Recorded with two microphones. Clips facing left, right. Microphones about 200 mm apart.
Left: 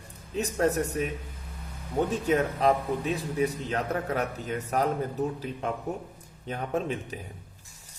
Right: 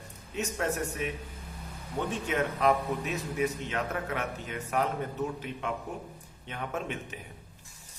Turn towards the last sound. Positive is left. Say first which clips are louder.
# left 6 dB
turn(degrees=35)  # may be behind; listen again after turning